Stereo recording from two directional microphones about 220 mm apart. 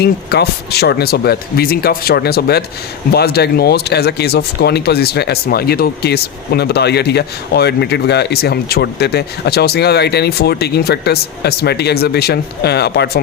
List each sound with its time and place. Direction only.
0.0 s speech: 45° left (ahead or behind)